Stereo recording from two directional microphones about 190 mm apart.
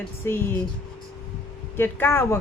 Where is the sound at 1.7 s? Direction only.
10° left (ahead or behind).